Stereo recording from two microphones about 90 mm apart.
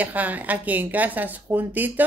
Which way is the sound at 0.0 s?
20° right (ahead or behind).